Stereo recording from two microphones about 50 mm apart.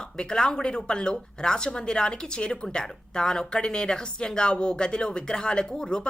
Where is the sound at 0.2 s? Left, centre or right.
Centre.